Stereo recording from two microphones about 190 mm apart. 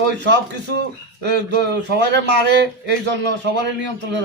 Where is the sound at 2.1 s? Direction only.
65° right (ahead or behind).